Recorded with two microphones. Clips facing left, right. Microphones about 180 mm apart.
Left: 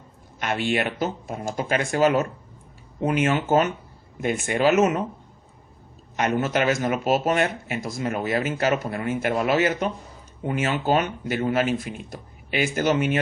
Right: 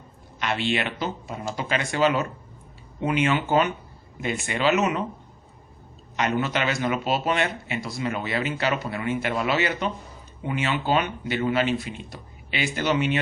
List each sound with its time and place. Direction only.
0.3 s speech: 50° left (ahead or behind)
6.1 s speech: 45° left (ahead or behind)